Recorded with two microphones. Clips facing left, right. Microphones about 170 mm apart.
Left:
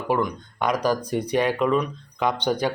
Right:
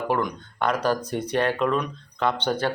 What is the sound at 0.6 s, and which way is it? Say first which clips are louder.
Speech: left 1 dB; 10° left (ahead or behind).